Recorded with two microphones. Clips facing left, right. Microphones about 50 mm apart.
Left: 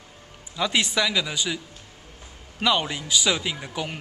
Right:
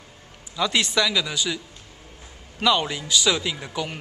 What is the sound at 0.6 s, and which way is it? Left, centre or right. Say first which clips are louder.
Speech: right 1 dB; centre.